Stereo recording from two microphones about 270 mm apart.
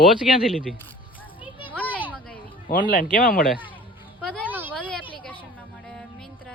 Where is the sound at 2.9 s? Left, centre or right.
Left.